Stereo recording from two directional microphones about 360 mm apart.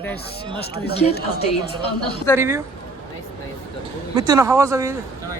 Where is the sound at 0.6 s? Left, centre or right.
Left.